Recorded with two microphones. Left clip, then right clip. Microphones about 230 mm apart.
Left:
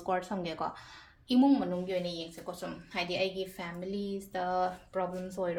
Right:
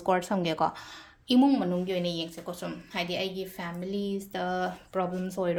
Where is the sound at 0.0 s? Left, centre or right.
Right.